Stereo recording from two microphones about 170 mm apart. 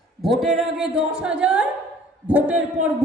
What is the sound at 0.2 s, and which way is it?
A man's voice, centre (ahead or behind).